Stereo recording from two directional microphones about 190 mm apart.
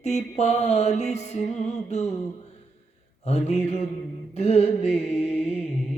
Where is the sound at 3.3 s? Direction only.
35° left (ahead or behind).